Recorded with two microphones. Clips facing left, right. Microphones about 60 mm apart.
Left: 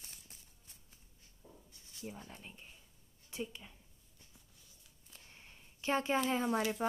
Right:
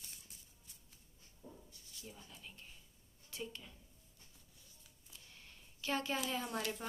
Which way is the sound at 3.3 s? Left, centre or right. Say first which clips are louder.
Left 4 dB; left.